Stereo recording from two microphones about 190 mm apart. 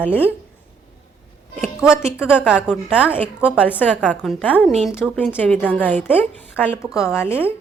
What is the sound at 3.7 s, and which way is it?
A woman's voice, 10° left (ahead or behind).